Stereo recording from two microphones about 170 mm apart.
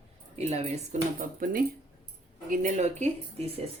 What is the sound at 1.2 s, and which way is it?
Speech, 55° right (ahead or behind).